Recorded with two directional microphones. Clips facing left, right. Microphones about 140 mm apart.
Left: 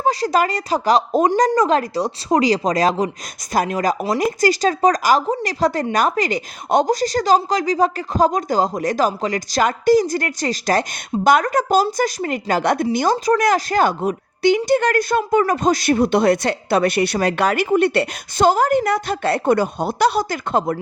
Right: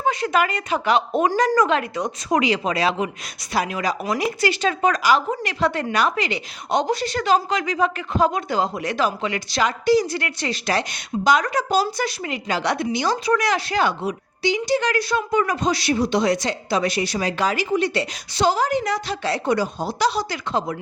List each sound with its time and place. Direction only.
0.0 s a woman's voice: 35° left (ahead or behind)